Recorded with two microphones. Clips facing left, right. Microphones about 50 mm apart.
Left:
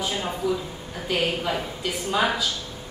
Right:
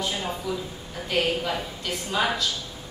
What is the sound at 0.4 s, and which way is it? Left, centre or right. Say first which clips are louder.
A woman's voice: left 4 dB; centre.